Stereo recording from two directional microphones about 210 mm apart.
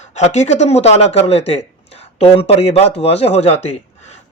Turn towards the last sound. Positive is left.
turn(degrees=30)  # may be behind; listen again after turning